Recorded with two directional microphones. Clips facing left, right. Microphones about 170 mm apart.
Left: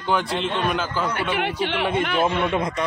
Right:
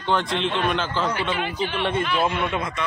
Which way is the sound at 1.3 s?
70° left (ahead or behind).